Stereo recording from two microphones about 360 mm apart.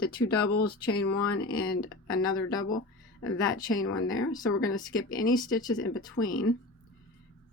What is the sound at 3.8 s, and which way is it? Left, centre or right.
Speech, left.